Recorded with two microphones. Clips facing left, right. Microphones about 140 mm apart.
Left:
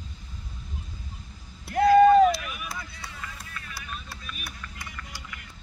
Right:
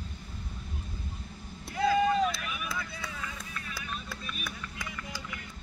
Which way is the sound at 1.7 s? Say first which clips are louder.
Left 10 dB; 60° left (ahead or behind).